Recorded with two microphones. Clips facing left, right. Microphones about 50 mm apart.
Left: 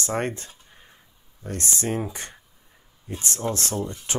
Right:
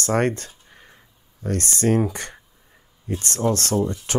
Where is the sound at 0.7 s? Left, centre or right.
Right.